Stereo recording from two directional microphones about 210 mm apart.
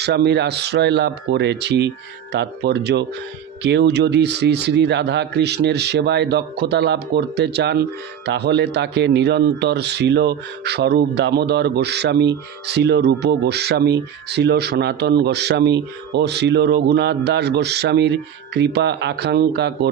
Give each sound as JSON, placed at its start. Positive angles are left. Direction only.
{"t": 0.0, "sound": "speech", "side_deg": -50}